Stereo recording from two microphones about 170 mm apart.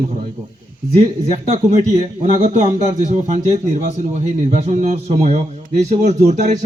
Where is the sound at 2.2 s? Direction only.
45° right (ahead or behind).